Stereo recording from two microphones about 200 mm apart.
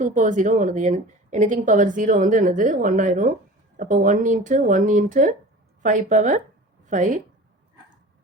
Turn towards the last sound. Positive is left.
turn(degrees=-40)  # may be behind; listen again after turning